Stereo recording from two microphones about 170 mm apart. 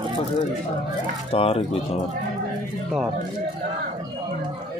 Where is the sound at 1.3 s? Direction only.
35° left (ahead or behind).